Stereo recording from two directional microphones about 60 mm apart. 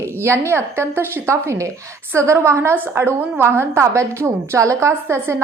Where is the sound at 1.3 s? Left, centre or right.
Right.